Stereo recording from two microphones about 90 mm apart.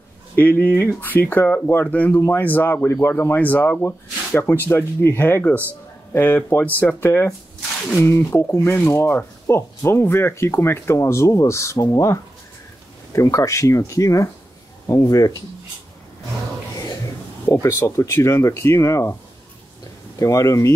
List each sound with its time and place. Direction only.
0.4 s speech: 20° left (ahead or behind)
2.1 s speech: 30° left (ahead or behind)
8.0 s speech: 30° left (ahead or behind)
8.9 s speech: 30° left (ahead or behind)
17.5 s speech: 30° left (ahead or behind)
20.2 s speech: 35° left (ahead or behind)